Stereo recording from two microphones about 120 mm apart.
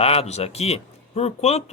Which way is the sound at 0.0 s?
55° left (ahead or behind).